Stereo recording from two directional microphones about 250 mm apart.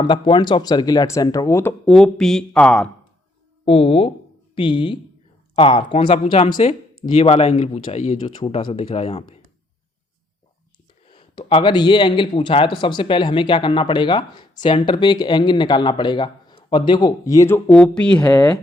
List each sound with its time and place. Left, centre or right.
0.0 s speech: centre
3.7 s speech: left
11.1 s speech: left